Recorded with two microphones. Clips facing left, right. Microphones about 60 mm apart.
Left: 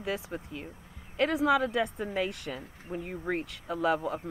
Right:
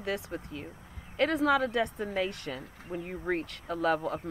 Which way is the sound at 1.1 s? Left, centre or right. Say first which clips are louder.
Even; centre.